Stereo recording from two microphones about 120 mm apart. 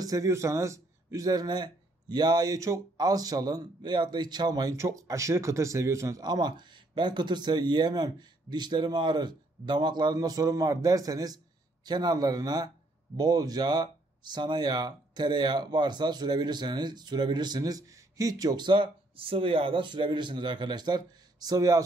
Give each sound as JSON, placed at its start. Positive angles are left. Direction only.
{"t": 0.0, "sound": "a man's voice", "side_deg": -30}